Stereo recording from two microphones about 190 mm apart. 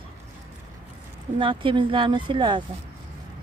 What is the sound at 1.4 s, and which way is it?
Speech, 25° right (ahead or behind).